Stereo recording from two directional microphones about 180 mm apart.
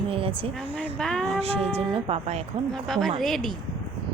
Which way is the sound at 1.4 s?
35° right (ahead or behind).